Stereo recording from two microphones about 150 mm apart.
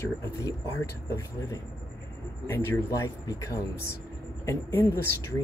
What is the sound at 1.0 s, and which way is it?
A man's voice, 20° left (ahead or behind).